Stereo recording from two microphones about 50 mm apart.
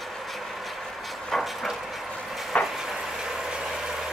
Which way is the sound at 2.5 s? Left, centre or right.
Left.